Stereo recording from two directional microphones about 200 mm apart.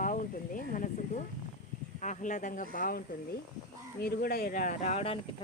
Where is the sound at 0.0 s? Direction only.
40° left (ahead or behind).